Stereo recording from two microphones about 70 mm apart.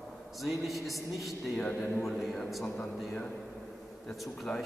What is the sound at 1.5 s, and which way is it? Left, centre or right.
Speech, centre.